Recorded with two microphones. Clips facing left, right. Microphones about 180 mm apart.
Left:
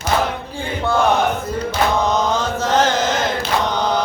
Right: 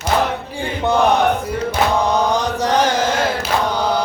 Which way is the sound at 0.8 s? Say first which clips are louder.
Right 2 dB; 20° right (ahead or behind).